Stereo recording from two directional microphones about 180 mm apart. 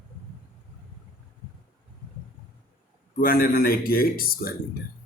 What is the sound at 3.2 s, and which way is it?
A man's voice, 55° left (ahead or behind).